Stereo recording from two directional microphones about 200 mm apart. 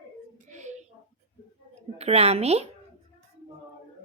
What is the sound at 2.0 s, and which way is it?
Speech, 30° right (ahead or behind).